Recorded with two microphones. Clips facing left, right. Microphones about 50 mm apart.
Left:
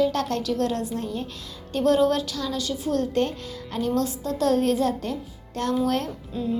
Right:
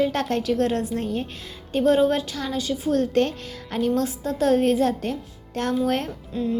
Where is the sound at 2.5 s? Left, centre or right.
Right.